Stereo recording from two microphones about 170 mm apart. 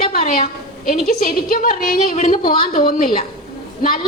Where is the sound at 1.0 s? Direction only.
55° left (ahead or behind).